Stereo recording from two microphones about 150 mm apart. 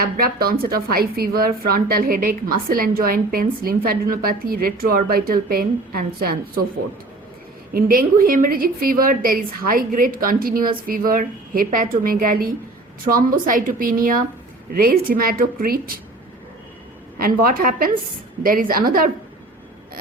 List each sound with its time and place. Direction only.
0.0 s a woman's voice: 85° right
7.7 s a woman's voice: 75° right (ahead or behind)
14.7 s a woman's voice: 80° right
17.2 s a woman's voice: 75° right (ahead or behind)